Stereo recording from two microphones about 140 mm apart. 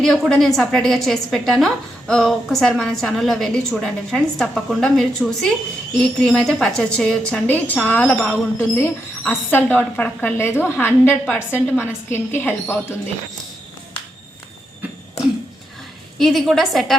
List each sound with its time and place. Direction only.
0.0 s a woman's voice: 5° left (ahead or behind)
16.1 s a woman's voice: centre (ahead or behind)